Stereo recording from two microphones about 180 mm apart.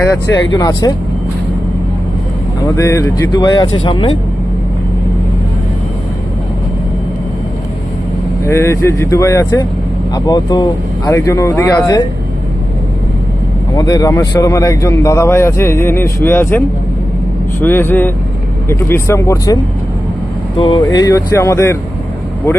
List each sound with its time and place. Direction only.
0.0 s speech: 20° left (ahead or behind)
2.6 s speech: 15° left (ahead or behind)
8.4 s a man's voice: 15° left (ahead or behind)
13.7 s a man's voice: 20° left (ahead or behind)
20.6 s a man's voice: 30° left (ahead or behind)